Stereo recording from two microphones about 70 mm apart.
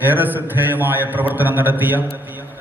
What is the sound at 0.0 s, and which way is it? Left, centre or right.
A man's voice, right.